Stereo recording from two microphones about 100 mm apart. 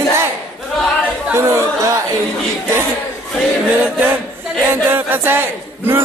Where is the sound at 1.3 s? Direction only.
25° right (ahead or behind).